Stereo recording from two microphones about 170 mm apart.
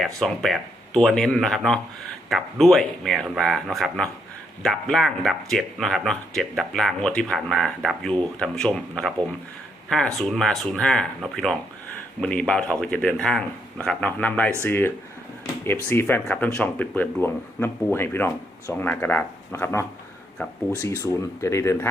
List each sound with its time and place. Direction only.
0.2 s speech: centre (ahead or behind)